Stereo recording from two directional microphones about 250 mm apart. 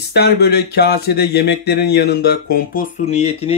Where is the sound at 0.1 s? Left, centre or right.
Left.